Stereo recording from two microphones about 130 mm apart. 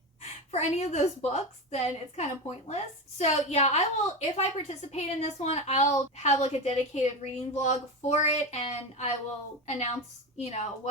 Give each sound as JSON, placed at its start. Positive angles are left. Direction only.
{"t": 0.2, "sound": "a woman's voice", "side_deg": 60}